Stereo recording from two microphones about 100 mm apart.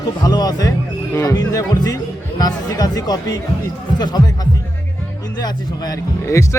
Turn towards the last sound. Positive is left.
turn(degrees=30)  # may be behind; listen again after turning